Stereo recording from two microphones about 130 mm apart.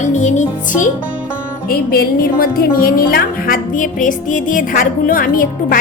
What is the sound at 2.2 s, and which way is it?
Speech, 90° left.